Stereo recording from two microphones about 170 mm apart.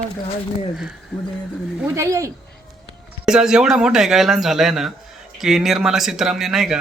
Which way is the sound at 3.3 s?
5° right (ahead or behind).